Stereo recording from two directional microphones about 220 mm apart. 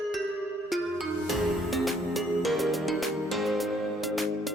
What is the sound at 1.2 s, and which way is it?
Music, centre (ahead or behind).